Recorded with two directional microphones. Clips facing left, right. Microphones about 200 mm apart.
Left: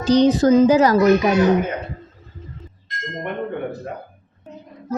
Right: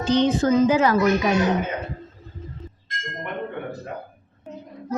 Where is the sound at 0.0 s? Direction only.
40° left (ahead or behind).